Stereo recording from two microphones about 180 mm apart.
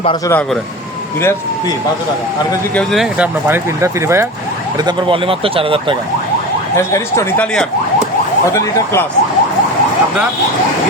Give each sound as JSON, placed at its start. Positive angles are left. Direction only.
{"t": 2.7, "sound": "speech", "side_deg": 0}
{"t": 4.9, "sound": "speech", "side_deg": -30}
{"t": 6.7, "sound": "speech", "side_deg": 15}
{"t": 8.5, "sound": "speech", "side_deg": 15}